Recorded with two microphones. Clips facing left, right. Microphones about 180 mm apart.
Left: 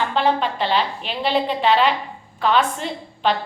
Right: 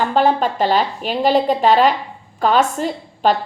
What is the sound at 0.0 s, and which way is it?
A woman's voice, 45° right (ahead or behind).